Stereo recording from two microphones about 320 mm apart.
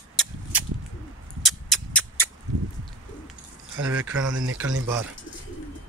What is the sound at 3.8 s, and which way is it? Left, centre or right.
Speech, right.